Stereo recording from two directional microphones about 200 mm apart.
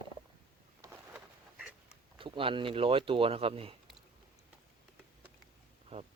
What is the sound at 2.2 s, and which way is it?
Speech, 25° right (ahead or behind).